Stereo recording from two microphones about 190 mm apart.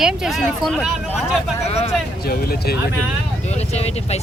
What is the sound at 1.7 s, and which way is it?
Speech, 35° left (ahead or behind).